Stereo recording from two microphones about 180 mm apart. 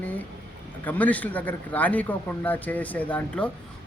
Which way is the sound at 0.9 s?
10° left (ahead or behind).